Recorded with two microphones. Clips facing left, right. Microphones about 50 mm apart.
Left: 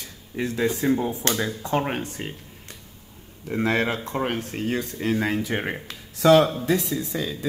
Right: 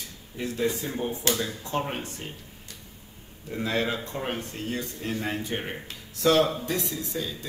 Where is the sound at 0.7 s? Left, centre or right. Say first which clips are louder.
Left 8 dB; left.